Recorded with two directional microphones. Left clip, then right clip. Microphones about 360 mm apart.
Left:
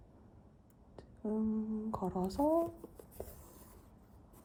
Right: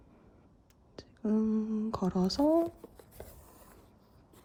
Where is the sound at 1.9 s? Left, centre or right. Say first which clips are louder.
Right 4 dB; left.